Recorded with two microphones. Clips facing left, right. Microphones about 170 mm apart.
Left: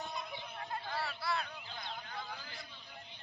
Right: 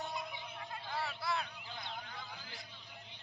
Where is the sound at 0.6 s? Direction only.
50° left (ahead or behind).